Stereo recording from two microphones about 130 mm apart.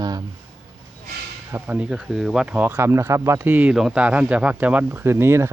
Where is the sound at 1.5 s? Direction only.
15° right (ahead or behind).